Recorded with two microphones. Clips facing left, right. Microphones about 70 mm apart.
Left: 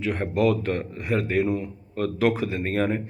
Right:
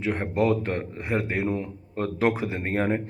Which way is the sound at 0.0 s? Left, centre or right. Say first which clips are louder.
Left 1 dB; right.